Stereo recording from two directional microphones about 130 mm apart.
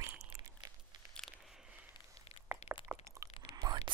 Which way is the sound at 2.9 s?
10° right (ahead or behind).